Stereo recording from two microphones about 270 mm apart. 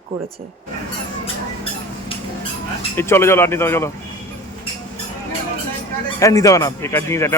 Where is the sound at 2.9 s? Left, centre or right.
Centre.